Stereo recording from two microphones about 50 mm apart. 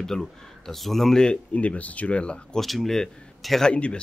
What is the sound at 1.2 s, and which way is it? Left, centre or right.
Speech, left.